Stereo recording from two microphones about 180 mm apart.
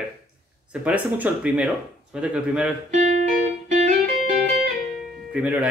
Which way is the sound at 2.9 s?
40° right (ahead or behind).